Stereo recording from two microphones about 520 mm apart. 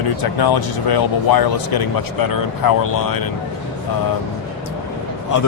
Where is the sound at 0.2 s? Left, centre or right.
Left.